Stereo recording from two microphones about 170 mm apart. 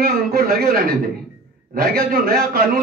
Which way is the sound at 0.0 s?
65° right (ahead or behind).